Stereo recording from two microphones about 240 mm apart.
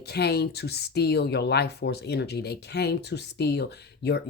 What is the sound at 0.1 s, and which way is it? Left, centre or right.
Speech, left.